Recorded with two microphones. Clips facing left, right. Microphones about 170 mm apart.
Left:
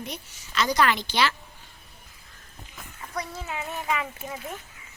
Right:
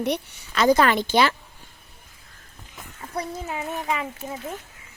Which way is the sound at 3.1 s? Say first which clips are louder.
Right 4 dB; 30° right (ahead or behind).